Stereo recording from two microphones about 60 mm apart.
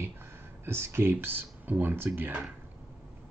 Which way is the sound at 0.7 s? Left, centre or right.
Right.